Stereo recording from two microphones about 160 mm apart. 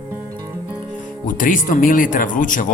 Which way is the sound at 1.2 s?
55° left (ahead or behind).